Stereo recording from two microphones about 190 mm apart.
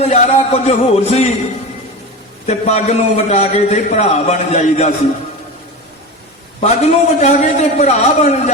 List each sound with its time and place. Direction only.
0.0 s a man's voice: 35° left (ahead or behind)
2.5 s a man's voice: 35° left (ahead or behind)
6.6 s a man's voice: 35° left (ahead or behind)